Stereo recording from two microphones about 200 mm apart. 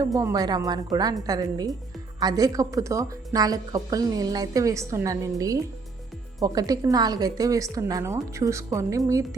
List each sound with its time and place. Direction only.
0.0 s a woman's voice: 15° right (ahead or behind)